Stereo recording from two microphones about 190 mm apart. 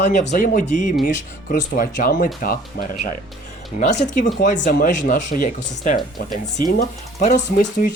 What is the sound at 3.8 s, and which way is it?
Speech, 40° left (ahead or behind).